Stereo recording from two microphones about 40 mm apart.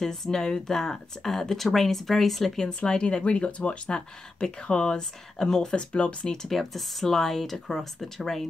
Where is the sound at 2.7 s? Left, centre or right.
Left.